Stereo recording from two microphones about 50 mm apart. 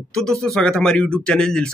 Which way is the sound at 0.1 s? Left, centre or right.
Centre.